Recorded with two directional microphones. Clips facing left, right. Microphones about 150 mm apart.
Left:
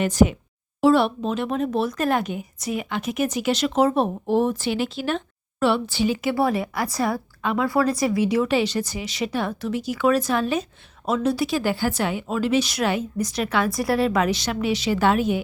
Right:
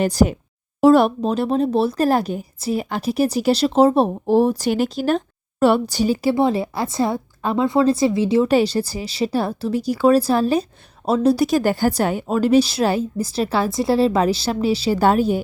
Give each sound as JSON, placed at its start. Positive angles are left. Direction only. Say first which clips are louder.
{"t": 0.0, "sound": "speech", "louder": "right 1 dB", "side_deg": -35}
{"t": 6.3, "sound": "speech", "louder": "right 3 dB", "side_deg": -25}